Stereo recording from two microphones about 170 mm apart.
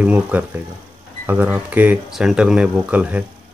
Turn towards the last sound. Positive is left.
turn(degrees=-10)  # may be behind; listen again after turning